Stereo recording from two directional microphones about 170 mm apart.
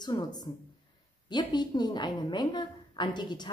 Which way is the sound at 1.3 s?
25° left (ahead or behind).